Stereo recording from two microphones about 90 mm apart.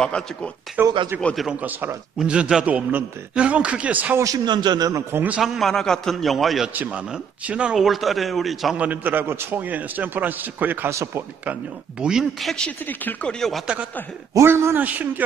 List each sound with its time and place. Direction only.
0.0 s speech: 10° left (ahead or behind)
0.8 s a man's voice: 20° right (ahead or behind)
1.3 s speech: centre (ahead or behind)
1.6 s a man's voice: 20° right (ahead or behind)
2.1 s a man's voice: 10° right (ahead or behind)
4.5 s a man's voice: 55° right (ahead or behind)
5.1 s a man's voice: 20° right (ahead or behind)
5.4 s speech: centre (ahead or behind)
6.7 s speech: 15° right (ahead or behind); by 8.7 s centre (ahead or behind)
8.7 s a man's voice: 15° right (ahead or behind)
12.0 s speech: 5° right (ahead or behind)
12.6 s speech: 15° left (ahead or behind)
14.3 s a man's voice: 30° right (ahead or behind)